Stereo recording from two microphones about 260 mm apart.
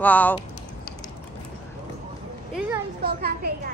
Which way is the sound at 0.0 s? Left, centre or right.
Centre.